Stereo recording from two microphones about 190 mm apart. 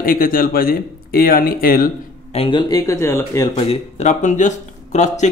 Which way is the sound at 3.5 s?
35° left (ahead or behind).